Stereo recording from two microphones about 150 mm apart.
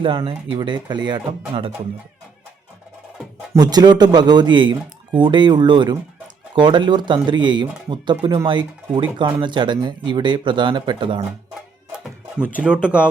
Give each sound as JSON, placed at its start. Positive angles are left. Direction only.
{"t": 0.0, "sound": "speech", "side_deg": -35}
{"t": 3.5, "sound": "speech", "side_deg": -25}
{"t": 12.5, "sound": "speech", "side_deg": -10}